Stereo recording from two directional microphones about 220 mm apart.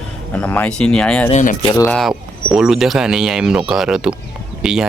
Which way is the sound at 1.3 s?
35° left (ahead or behind).